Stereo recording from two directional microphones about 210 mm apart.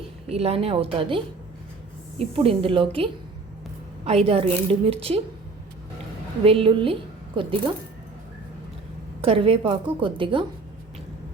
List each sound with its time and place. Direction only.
0.3 s a woman's voice: 30° right (ahead or behind)
6.4 s a woman's voice: 25° right (ahead or behind)
9.2 s a woman's voice: 25° right (ahead or behind)